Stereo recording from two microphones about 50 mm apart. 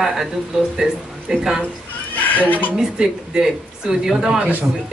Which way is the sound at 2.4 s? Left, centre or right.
Left.